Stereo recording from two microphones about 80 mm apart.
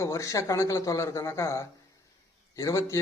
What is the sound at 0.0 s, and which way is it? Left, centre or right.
Speech, left.